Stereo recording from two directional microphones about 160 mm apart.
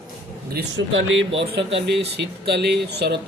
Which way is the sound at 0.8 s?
90° right.